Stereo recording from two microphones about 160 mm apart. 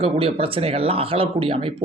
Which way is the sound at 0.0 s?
35° right (ahead or behind).